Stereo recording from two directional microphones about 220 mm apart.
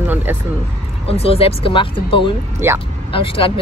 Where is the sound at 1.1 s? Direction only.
25° left (ahead or behind).